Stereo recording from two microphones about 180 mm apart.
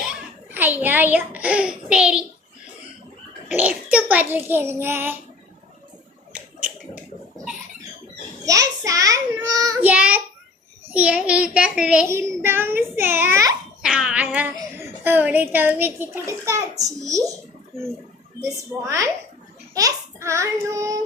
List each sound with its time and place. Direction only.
0.0 s a child's voice: 5° right (ahead or behind)
3.5 s a child's voice: 10° right (ahead or behind)
6.3 s finger snapping: 5° right (ahead or behind)
8.4 s a child's voice: 20° right (ahead or behind)
9.8 s a child's voice: 10° right (ahead or behind)
12.0 s a child's voice: 15° right (ahead or behind)
13.8 s a child's voice: 5° right (ahead or behind)
18.5 s a child's voice: 20° right (ahead or behind)